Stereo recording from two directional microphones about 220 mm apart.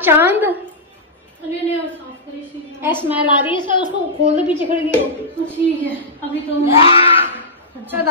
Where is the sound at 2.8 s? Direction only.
10° right (ahead or behind).